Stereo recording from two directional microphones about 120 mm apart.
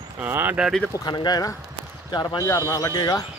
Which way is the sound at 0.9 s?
35° left (ahead or behind).